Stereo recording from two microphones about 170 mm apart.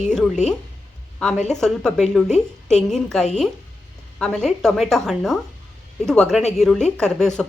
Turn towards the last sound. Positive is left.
turn(degrees=5)  # may be behind; listen again after turning